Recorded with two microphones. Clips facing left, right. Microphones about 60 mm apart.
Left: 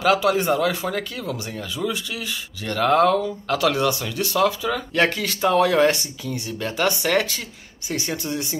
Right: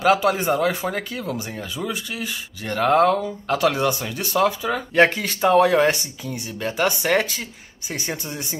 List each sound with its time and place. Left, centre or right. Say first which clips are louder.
0.0 s speech: even; centre